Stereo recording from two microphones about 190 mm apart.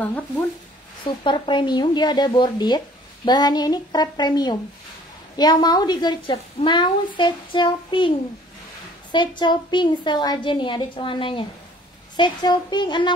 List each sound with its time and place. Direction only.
1.0 s a woman's voice: 25° left (ahead or behind)
9.1 s a woman's voice: 25° left (ahead or behind)